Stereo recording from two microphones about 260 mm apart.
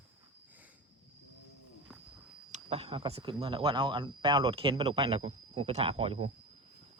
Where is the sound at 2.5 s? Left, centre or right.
Right.